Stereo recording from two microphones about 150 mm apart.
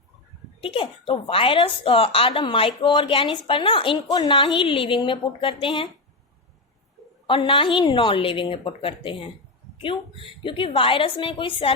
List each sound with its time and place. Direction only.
0.6 s a woman's voice: 35° left (ahead or behind)
7.3 s a woman's voice: 35° left (ahead or behind)